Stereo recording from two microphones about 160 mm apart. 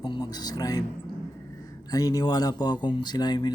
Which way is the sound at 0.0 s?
25° left (ahead or behind).